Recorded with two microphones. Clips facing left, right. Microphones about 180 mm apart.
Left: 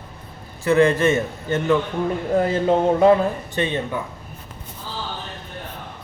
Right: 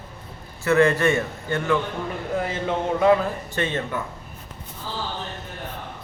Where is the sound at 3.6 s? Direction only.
15° left (ahead or behind).